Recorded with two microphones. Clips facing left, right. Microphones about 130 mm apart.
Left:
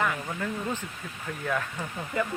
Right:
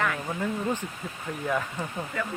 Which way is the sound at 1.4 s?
10° right (ahead or behind).